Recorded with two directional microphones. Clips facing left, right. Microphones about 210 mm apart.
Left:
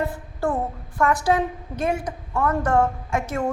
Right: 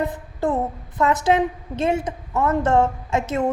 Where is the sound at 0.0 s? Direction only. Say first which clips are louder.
Right 2 dB; 20° right (ahead or behind).